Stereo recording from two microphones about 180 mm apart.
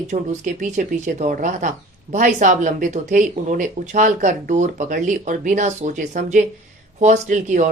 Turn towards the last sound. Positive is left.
turn(degrees=-40)  # may be behind; listen again after turning